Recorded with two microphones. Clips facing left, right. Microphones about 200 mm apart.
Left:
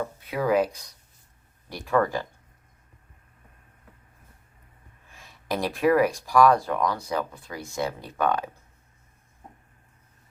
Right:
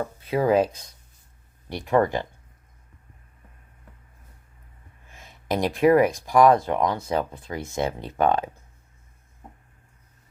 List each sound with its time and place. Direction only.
0.3 s speech: 25° right (ahead or behind)
5.1 s speech: 20° right (ahead or behind)